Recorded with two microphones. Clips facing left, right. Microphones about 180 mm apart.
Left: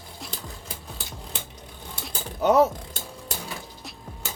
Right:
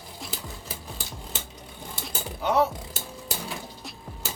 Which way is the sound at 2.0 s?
5° right (ahead or behind).